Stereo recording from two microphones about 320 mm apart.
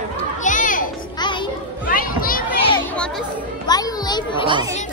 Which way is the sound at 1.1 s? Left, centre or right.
Centre.